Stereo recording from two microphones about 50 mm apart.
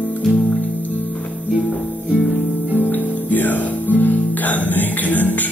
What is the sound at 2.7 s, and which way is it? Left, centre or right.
Music, left.